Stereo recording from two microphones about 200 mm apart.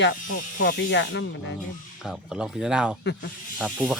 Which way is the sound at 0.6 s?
60° left (ahead or behind).